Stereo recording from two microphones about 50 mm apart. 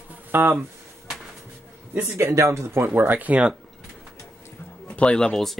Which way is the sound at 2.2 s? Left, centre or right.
Right.